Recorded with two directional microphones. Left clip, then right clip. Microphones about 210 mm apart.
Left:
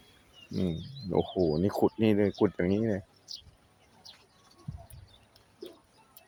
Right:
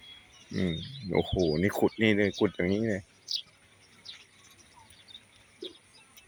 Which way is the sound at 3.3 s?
55° left (ahead or behind).